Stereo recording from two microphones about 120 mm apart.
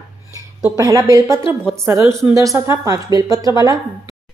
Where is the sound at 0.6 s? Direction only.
25° right (ahead or behind).